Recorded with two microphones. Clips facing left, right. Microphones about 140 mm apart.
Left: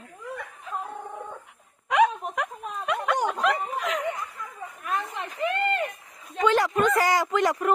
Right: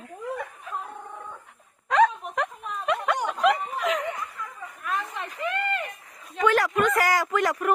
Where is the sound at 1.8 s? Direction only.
10° left (ahead or behind).